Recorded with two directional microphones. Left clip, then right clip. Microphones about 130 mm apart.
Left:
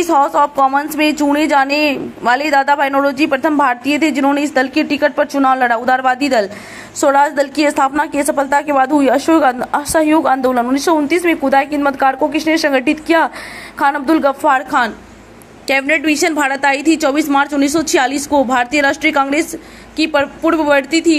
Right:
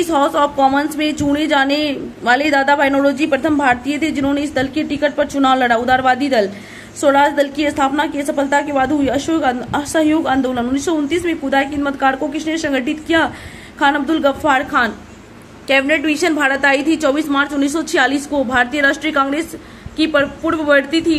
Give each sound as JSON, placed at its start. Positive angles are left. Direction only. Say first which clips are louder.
{"t": 0.1, "sound": "a woman's voice", "louder": "left 4 dB", "side_deg": 25}
{"t": 15.6, "sound": "a woman's voice", "louder": "even", "side_deg": 35}